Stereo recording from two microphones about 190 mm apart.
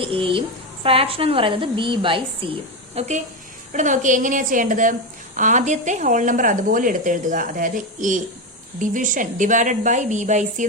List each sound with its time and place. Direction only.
0.0 s a woman's voice: 30° right (ahead or behind)